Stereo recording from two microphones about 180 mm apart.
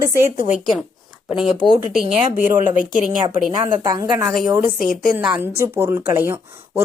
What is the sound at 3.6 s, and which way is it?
Speech, 25° right (ahead or behind).